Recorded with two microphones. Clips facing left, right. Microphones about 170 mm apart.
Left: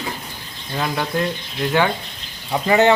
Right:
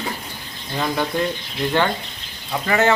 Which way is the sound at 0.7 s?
Centre (ahead or behind).